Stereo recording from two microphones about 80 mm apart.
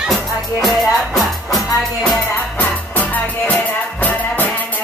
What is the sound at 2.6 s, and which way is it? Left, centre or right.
Music, left.